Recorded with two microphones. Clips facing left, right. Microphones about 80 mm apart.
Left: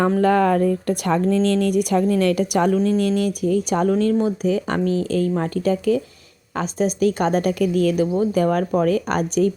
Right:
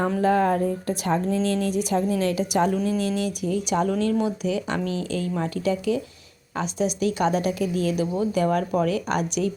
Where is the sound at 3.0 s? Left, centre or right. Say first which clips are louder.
Left 5 dB; left.